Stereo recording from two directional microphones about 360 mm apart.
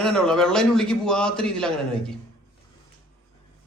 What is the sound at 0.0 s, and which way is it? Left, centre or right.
A man's voice, centre.